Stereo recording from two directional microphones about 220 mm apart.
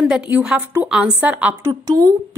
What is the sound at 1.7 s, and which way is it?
Speech, 15° right (ahead or behind).